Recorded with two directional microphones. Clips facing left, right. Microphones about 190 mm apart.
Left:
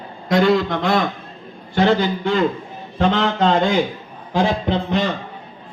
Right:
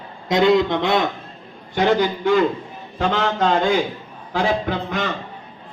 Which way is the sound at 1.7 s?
15° right (ahead or behind).